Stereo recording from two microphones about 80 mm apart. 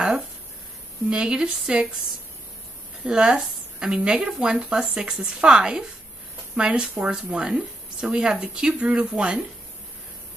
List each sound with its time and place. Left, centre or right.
1.1 s speech: centre
3.1 s speech: centre